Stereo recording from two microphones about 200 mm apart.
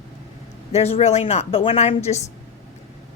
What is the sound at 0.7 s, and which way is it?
A woman's voice, 30° left (ahead or behind).